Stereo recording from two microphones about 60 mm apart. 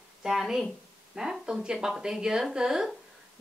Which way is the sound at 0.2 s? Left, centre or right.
Centre.